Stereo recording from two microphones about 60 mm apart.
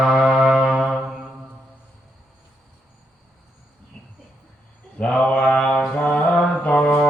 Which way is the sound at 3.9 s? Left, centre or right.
Centre.